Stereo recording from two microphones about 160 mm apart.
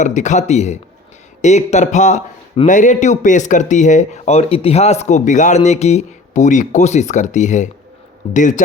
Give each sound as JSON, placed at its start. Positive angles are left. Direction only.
{"t": 0.0, "sound": "speech", "side_deg": 50}